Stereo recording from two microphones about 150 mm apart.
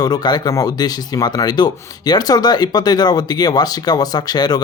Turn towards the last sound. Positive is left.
turn(degrees=25)  # may be behind; listen again after turning